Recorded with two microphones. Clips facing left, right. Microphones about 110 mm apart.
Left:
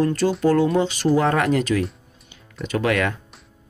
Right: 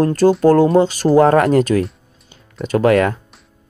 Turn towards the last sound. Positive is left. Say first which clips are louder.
# right 8 dB
turn(degrees=-40)  # may be behind; listen again after turning